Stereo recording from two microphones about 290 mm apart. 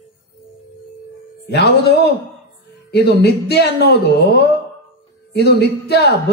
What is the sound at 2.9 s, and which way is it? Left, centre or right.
A man's voice, left.